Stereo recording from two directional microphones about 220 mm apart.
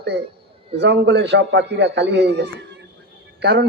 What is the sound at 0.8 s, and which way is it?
A man's voice, 50° right (ahead or behind).